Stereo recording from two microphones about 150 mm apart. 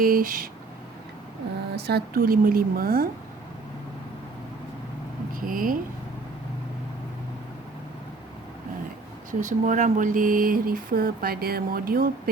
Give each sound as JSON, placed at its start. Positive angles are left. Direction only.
{"t": 0.0, "sound": "speech", "side_deg": -70}
{"t": 1.7, "sound": "speech", "side_deg": -90}
{"t": 5.3, "sound": "speech", "side_deg": -70}
{"t": 9.4, "sound": "speech", "side_deg": -55}